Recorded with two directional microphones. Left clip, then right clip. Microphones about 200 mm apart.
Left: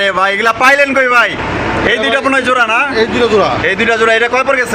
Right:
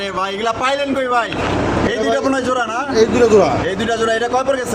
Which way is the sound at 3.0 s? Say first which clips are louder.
Right 4 dB; 30° right (ahead or behind).